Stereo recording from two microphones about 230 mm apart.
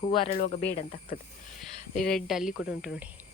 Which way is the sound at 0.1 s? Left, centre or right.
Left.